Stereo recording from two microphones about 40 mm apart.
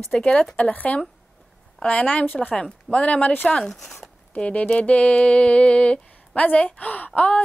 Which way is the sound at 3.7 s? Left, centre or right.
Centre.